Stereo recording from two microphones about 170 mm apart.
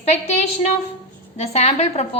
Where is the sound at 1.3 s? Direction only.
40° left (ahead or behind).